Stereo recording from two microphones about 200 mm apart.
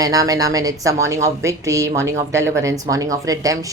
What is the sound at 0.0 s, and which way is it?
A woman's voice, 20° right (ahead or behind).